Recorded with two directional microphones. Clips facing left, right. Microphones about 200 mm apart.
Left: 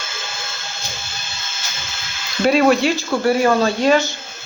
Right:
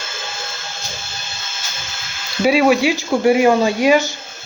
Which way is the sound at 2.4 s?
5° right (ahead or behind).